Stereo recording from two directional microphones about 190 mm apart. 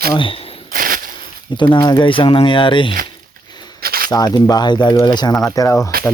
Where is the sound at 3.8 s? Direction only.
50° right (ahead or behind).